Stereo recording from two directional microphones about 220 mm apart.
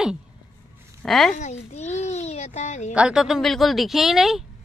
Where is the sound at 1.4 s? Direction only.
30° left (ahead or behind).